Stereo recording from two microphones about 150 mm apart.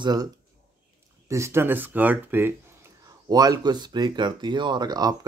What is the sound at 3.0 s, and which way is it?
Speech, 25° right (ahead or behind).